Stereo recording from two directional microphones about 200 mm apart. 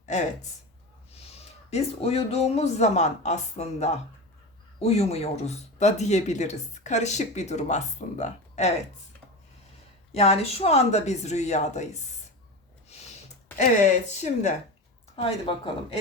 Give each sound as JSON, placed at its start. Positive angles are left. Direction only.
{"t": 0.0, "sound": "speech", "side_deg": 35}
{"t": 1.7, "sound": "speech", "side_deg": 30}
{"t": 10.2, "sound": "speech", "side_deg": 30}
{"t": 14.1, "sound": "speech", "side_deg": 35}